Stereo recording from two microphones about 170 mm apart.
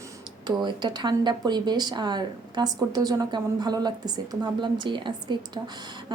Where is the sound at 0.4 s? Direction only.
25° right (ahead or behind).